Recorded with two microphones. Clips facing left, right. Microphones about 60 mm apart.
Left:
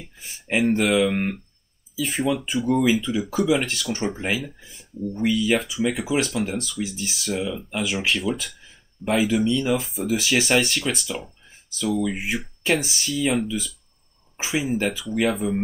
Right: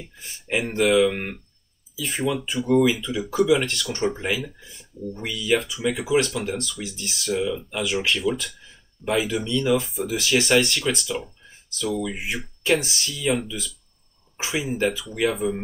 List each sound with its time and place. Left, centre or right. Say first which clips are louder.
0.7 s speech: right 2 dB; centre
9.9 s speech: left 2 dB; centre
10.2 s speech: right 2 dB; centre